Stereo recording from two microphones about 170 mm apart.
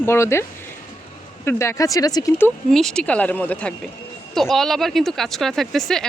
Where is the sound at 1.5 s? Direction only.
15° left (ahead or behind).